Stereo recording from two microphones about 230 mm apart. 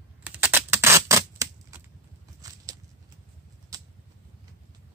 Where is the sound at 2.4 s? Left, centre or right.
Centre.